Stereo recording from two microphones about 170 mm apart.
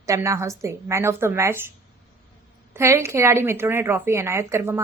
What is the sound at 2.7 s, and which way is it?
A woman's voice, 15° right (ahead or behind).